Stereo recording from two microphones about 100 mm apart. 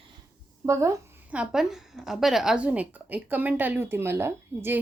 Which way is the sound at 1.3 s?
10° right (ahead or behind).